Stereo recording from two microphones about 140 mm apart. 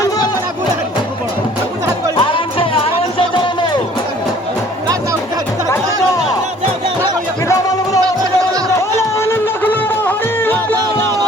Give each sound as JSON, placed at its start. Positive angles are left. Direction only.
{"t": 2.1, "sound": "music", "side_deg": 40}
{"t": 7.4, "sound": "a sound", "side_deg": 25}
{"t": 8.7, "sound": "music", "side_deg": 20}